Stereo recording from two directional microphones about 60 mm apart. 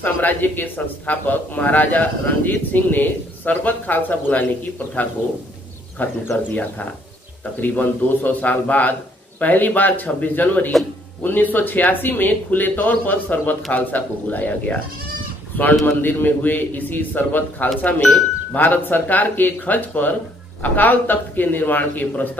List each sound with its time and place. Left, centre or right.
0.0 s speech: left
6.0 s speech: left
7.6 s a man's voice: left